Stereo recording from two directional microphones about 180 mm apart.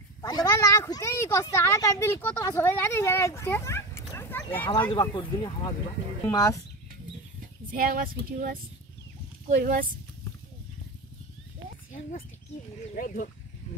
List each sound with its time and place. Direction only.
0.2 s a woman's voice: 20° left (ahead or behind)
4.9 s a woman's voice: 25° left (ahead or behind)
7.7 s speech: 55° right (ahead or behind)
9.6 s speech: 45° right (ahead or behind)
12.9 s speech: 50° left (ahead or behind)